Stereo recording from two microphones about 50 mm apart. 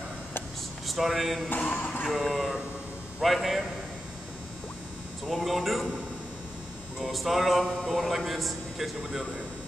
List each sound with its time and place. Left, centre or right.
0.8 s speech: centre
1.6 s speech: left
2.0 s a man's voice: centre
5.2 s a man's voice: centre
7.0 s a man's voice: centre